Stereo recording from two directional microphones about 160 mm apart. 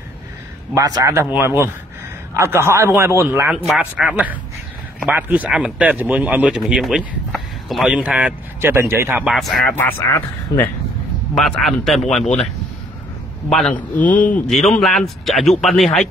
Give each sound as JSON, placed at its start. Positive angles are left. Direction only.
{"t": 0.7, "sound": "speech", "side_deg": -20}
{"t": 3.4, "sound": "speech", "side_deg": -5}
{"t": 9.2, "sound": "speech", "side_deg": 0}
{"t": 9.8, "sound": "speech", "side_deg": 15}
{"t": 11.3, "sound": "speech", "side_deg": 0}
{"t": 13.5, "sound": "speech", "side_deg": 5}